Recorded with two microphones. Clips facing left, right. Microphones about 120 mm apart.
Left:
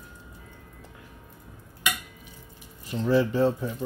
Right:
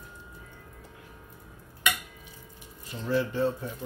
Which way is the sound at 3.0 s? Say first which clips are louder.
Left 5 dB; 90° left.